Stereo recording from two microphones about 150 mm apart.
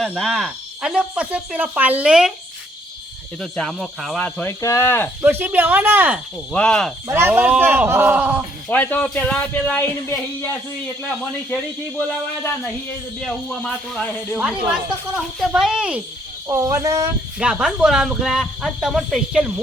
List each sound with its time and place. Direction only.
0.2 s speech: centre (ahead or behind)
3.4 s speech: 5° left (ahead or behind)
5.2 s speech: 10° right (ahead or behind)
6.5 s speech: 5° left (ahead or behind)
7.1 s speech: 15° right (ahead or behind)
8.7 s speech: 10° left (ahead or behind)
11.5 s speech: 10° left (ahead or behind)
14.3 s speech: 10° right (ahead or behind)
16.5 s speech: 20° right (ahead or behind)
17.3 s speech: 5° right (ahead or behind)